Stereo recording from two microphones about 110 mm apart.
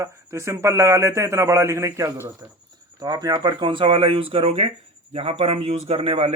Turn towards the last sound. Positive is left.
turn(degrees=-60)  # may be behind; listen again after turning